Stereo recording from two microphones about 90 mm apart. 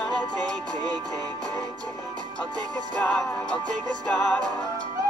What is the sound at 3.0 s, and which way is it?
Music, 10° left (ahead or behind).